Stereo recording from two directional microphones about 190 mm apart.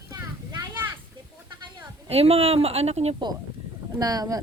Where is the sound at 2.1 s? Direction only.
30° right (ahead or behind).